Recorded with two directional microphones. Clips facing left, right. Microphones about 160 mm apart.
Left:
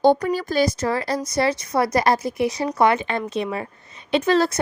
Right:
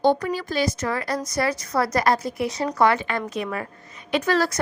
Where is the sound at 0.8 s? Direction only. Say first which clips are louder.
Left 3 dB; 30° left (ahead or behind).